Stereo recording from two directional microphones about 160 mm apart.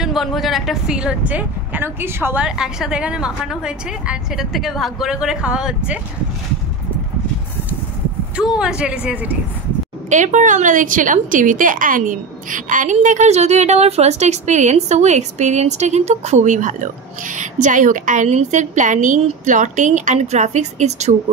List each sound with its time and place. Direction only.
0.0 s speech: centre (ahead or behind)
8.4 s speech: 5° right (ahead or behind)
10.0 s a woman's voice: 50° right (ahead or behind)